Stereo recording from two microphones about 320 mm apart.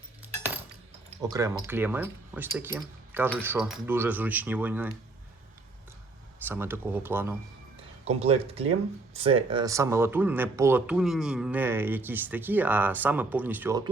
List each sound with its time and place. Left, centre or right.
1.2 s speech: centre
6.5 s speech: centre
8.0 s speech: centre